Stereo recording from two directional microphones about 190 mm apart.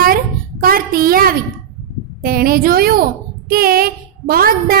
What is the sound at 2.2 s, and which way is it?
Child singing, 50° right (ahead or behind).